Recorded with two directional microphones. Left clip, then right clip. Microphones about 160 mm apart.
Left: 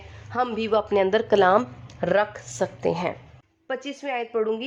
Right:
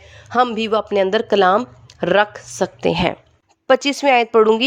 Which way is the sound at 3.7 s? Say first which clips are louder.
Right 15 dB; 90° right.